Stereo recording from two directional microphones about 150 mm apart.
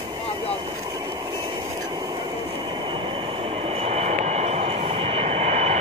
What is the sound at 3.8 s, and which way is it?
Vehicle, 50° right (ahead or behind).